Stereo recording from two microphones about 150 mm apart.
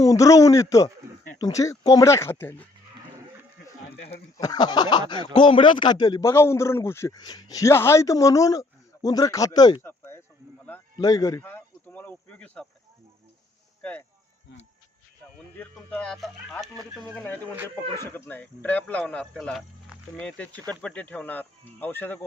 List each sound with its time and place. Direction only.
0.0 s speech: 20° left (ahead or behind)
4.4 s speech: 25° left (ahead or behind)
9.8 s a sound: 15° left (ahead or behind)
10.9 s speech: 25° left (ahead or behind); by 12.6 s 5° left (ahead or behind)
13.8 s speech: 10° left (ahead or behind)
15.5 s speech: 10° left (ahead or behind)